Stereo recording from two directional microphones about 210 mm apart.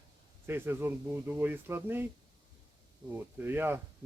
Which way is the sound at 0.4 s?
10° right (ahead or behind).